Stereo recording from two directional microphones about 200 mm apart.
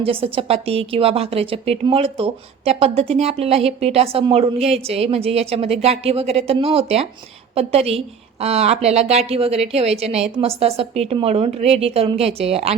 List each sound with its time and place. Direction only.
0.0 s a woman's voice: 25° right (ahead or behind)